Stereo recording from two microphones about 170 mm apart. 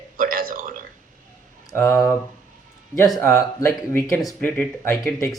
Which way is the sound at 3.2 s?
15° left (ahead or behind).